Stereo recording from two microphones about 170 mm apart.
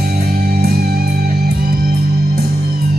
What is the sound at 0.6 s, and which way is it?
Music, 70° right (ahead or behind).